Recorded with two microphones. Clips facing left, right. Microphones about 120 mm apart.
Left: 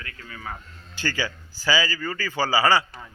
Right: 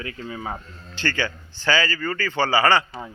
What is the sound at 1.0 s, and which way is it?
A man's voice, 10° left (ahead or behind).